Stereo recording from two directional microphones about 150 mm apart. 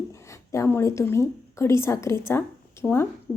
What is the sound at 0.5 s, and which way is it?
A woman's voice, 20° left (ahead or behind).